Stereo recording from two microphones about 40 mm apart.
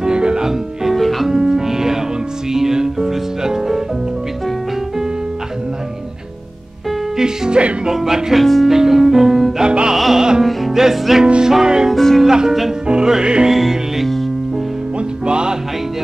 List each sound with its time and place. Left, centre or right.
0.0 s music: right
0.9 s music: centre
1.3 s music: centre
7.2 s music: centre
7.8 s speech: centre
8.6 s music: centre
9.7 s music: right
9.9 s music: centre
11.9 s music: centre
12.3 s music: centre
13.5 s music: centre
15.0 s music: right